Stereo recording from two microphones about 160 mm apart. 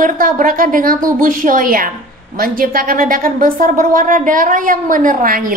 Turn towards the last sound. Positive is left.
turn(degrees=-60)  # may be behind; listen again after turning